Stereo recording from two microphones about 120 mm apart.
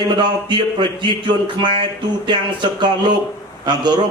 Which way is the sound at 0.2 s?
40° right (ahead or behind).